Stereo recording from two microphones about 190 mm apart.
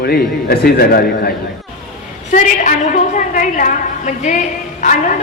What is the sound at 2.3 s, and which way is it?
A man's voice, 40° left (ahead or behind).